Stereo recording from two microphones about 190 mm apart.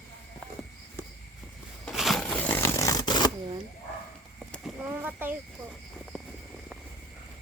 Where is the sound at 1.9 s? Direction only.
Centre (ahead or behind); by 3.3 s 20° left (ahead or behind).